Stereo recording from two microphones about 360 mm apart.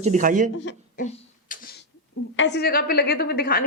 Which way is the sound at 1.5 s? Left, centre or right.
Left.